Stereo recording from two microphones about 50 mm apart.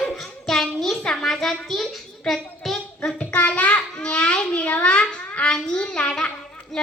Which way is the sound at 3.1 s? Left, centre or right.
Left.